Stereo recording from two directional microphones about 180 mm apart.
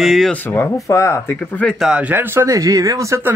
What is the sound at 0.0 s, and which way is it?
Speech, centre (ahead or behind).